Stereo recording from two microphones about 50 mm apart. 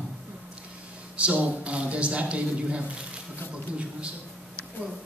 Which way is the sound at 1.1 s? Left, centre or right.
Right.